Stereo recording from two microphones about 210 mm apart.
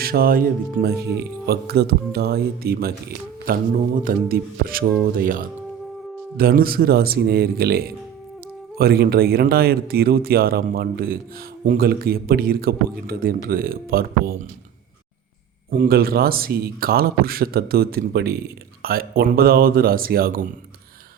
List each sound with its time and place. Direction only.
0.0 s speech: 45° right (ahead or behind)
15.8 s speech: 45° right (ahead or behind)